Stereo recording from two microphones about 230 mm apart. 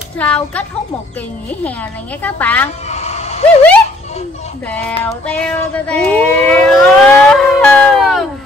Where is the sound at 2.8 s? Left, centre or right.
Left.